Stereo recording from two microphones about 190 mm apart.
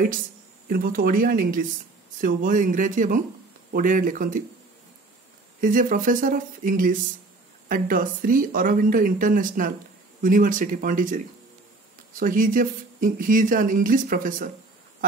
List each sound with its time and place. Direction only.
0.7 s speech: 50° right (ahead or behind)
5.6 s speech: 45° right (ahead or behind)